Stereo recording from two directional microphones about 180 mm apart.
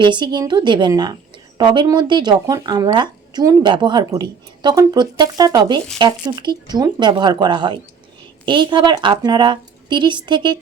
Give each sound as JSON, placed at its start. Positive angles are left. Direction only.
{"t": 0.0, "sound": "speech", "side_deg": -25}